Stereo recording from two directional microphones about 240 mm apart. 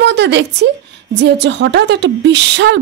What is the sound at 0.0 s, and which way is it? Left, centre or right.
A woman's voice, right.